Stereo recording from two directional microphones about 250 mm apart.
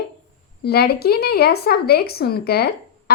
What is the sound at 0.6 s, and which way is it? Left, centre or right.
A woman's voice, left.